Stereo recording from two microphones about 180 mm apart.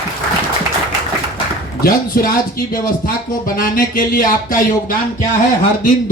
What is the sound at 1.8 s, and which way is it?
Speech, 55° left (ahead or behind).